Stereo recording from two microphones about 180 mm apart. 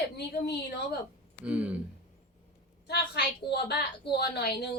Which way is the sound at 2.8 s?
65° left (ahead or behind).